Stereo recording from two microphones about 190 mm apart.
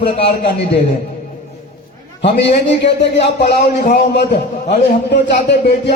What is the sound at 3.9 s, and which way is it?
A man's voice, 55° left (ahead or behind).